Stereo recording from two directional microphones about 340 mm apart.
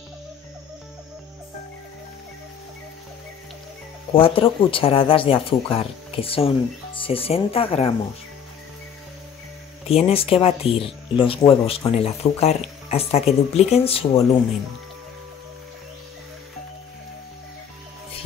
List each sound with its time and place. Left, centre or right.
4.1 s speech: centre
9.8 s speech: centre